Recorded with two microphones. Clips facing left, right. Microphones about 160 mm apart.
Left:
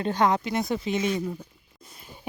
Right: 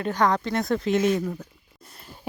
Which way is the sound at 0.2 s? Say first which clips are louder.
Right 1 dB; 15° left (ahead or behind).